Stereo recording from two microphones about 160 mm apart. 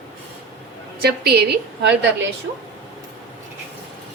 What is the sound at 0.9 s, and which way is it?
Speech, 80° right.